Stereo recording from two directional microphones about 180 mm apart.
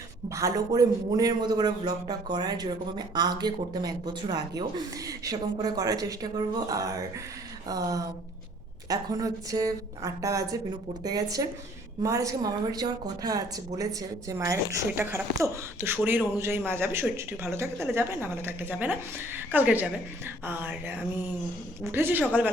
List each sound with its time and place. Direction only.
0.3 s a man's voice: 20° right (ahead or behind)